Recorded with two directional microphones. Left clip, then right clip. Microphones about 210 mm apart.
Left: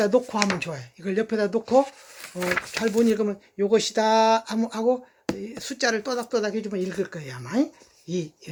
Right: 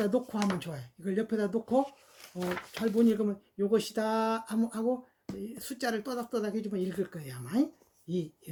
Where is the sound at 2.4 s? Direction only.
20° left (ahead or behind).